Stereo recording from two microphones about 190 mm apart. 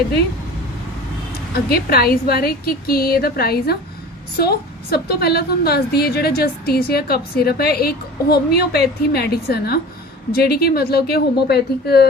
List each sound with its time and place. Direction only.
1.7 s a woman's voice: 55° left (ahead or behind)